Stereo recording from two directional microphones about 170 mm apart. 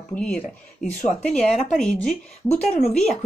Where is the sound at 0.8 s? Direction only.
Centre (ahead or behind).